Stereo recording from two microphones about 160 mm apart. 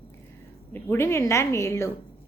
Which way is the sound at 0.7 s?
15° left (ahead or behind).